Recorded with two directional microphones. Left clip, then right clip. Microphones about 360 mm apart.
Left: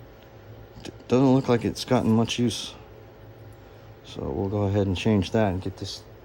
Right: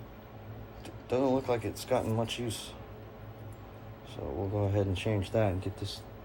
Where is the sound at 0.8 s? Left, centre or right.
Left.